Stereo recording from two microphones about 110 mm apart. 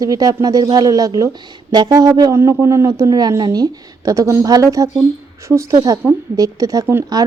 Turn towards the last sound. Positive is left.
turn(degrees=-35)  # may be behind; listen again after turning